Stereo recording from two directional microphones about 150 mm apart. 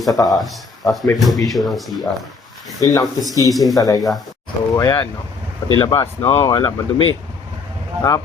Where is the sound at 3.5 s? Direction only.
Centre (ahead or behind).